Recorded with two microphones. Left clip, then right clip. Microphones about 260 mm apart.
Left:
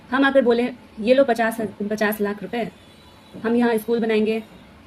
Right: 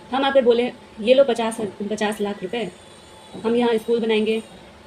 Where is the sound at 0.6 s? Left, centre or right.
Left.